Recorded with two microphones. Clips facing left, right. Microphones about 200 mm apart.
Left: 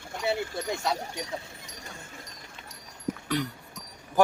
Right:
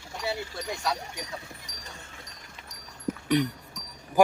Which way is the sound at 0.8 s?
25° left (ahead or behind).